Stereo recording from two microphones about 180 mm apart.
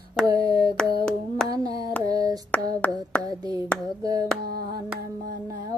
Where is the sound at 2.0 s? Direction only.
20° right (ahead or behind).